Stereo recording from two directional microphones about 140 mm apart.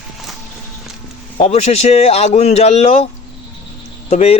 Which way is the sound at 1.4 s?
50° left (ahead or behind).